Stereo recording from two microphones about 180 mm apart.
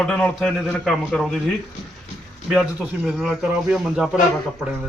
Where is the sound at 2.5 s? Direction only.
Centre (ahead or behind).